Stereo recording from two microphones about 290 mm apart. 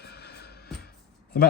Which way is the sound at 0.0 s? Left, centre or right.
Left.